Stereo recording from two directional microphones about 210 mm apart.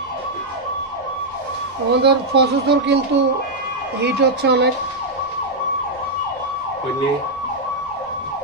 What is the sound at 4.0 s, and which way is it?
Speech, 55° right (ahead or behind).